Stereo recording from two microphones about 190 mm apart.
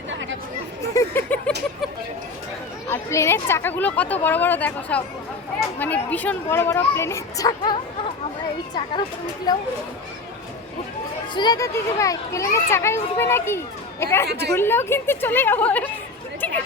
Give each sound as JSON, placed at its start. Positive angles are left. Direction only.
{"t": 0.1, "sound": "chatter", "side_deg": -75}
{"t": 0.9, "sound": "a sound", "side_deg": 10}
{"t": 2.9, "sound": "a child's voice", "side_deg": 15}
{"t": 9.5, "sound": "speech", "side_deg": 20}
{"t": 11.3, "sound": "a child's voice", "side_deg": 20}